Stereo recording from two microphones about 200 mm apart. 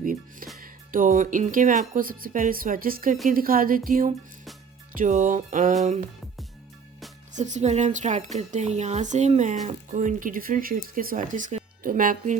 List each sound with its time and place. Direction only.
0.0 s music: 45° right (ahead or behind)
0.6 s speech: 45° right (ahead or behind)
7.3 s speech: 35° right (ahead or behind)